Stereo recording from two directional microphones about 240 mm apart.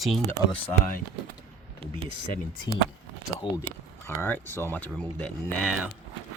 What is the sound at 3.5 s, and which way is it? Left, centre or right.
Speech, centre.